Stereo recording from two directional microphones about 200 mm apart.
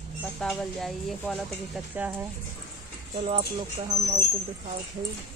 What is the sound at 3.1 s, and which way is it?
Speech, 30° right (ahead or behind).